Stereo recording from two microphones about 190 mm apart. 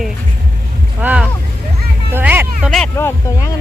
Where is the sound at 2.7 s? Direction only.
5° left (ahead or behind).